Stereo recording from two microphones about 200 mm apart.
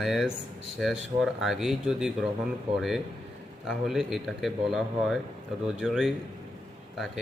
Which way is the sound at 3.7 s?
Centre (ahead or behind).